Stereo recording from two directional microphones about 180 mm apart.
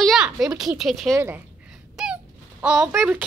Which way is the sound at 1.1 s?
10° right (ahead or behind).